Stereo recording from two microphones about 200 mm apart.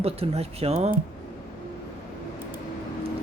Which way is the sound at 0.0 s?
30° right (ahead or behind).